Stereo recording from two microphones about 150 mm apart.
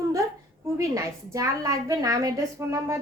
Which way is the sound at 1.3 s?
20° right (ahead or behind).